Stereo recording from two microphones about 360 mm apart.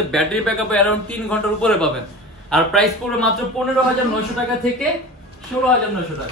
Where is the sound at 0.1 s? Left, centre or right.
Centre.